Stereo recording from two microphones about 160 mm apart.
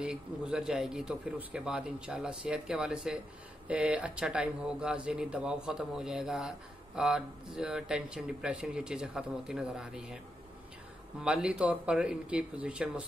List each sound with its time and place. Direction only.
0.0 s a man's voice: 5° right (ahead or behind)
11.1 s speech: 5° right (ahead or behind)